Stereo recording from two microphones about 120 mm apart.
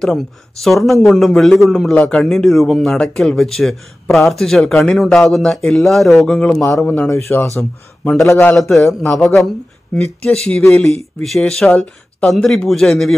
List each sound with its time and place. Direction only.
0.0 s a man's voice: centre (ahead or behind)
7.1 s speech: 20° left (ahead or behind)
8.5 s a man's voice: centre (ahead or behind)